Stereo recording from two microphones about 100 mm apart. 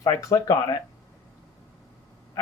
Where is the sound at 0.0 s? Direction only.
30° left (ahead or behind).